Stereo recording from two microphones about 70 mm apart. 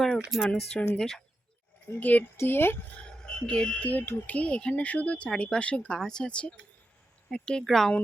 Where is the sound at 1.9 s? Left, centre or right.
Left.